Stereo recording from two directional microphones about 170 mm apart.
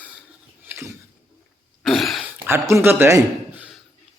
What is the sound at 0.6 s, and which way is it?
Mechanisms, 15° right (ahead or behind).